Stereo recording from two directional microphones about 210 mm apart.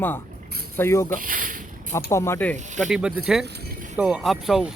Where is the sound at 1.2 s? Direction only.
40° right (ahead or behind).